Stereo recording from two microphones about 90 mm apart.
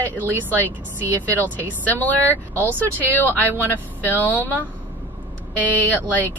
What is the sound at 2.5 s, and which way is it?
Speech, 25° right (ahead or behind).